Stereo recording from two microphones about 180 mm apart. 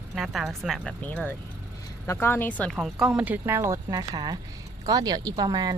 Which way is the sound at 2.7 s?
5° right (ahead or behind).